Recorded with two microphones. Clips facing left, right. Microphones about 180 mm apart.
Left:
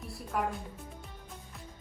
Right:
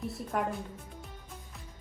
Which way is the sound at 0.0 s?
Centre (ahead or behind).